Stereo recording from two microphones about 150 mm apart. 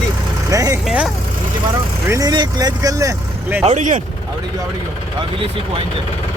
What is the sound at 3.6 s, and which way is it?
Speech, 50° right (ahead or behind).